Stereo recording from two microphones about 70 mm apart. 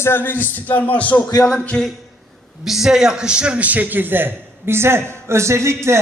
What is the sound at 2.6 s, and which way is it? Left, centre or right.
A man's voice, centre.